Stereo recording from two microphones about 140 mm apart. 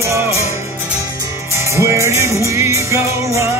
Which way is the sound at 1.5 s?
20° right (ahead or behind).